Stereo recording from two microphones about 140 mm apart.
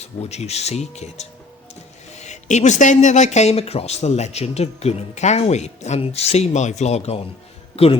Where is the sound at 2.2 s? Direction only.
55° left (ahead or behind).